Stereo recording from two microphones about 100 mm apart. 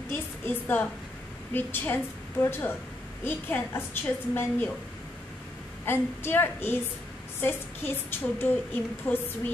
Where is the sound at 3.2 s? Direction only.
20° left (ahead or behind).